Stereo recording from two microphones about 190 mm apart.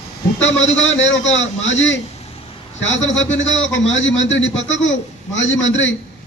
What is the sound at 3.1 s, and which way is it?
A man's voice, 80° left.